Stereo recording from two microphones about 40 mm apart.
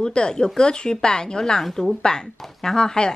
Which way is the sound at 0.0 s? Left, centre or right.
Centre.